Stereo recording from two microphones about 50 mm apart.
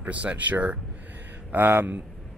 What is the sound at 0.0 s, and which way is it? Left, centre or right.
Speech, right.